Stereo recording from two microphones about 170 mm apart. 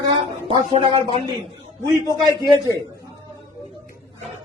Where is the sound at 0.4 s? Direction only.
35° right (ahead or behind).